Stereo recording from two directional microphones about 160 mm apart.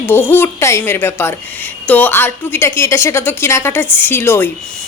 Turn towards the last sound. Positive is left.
turn(degrees=15)  # may be behind; listen again after turning